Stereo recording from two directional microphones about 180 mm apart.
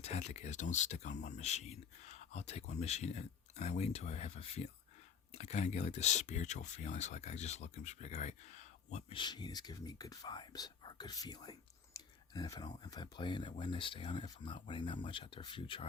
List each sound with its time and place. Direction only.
0.0 s speech: 40° left (ahead or behind)
9.1 s speech: 25° left (ahead or behind)